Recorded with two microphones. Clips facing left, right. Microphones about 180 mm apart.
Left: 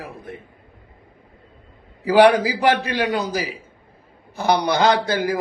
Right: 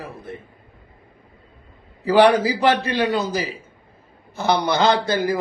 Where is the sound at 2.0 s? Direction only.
10° left (ahead or behind).